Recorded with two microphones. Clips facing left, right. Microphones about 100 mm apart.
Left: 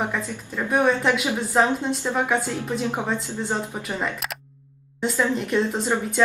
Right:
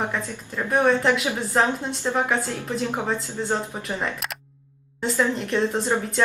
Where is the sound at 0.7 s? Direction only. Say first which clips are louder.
Right 1 dB; centre (ahead or behind).